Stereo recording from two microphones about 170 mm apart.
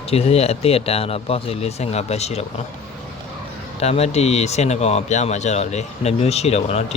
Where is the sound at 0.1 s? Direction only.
35° left (ahead or behind).